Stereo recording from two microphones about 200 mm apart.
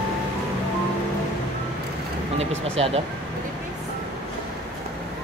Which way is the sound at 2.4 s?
30° right (ahead or behind).